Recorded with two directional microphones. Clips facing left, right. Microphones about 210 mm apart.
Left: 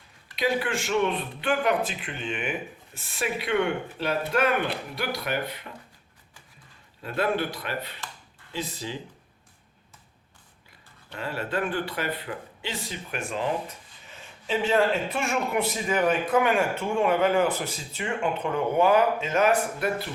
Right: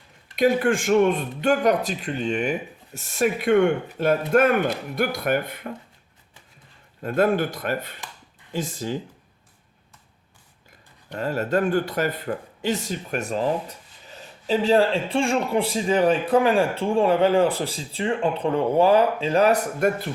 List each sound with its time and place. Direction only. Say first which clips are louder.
0.3 s speech: right 7 dB; 50° right (ahead or behind)
7.0 s speech: right 6 dB; 45° right (ahead or behind)
11.1 s speech: right 7 dB; 40° right (ahead or behind)